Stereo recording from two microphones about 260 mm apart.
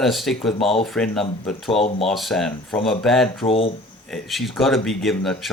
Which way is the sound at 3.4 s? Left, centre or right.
Left.